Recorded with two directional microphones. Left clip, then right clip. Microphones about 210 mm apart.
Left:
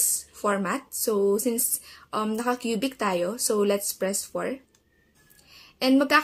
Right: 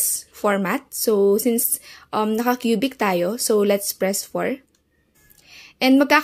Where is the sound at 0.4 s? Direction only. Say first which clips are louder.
Right 5 dB; 30° right (ahead or behind).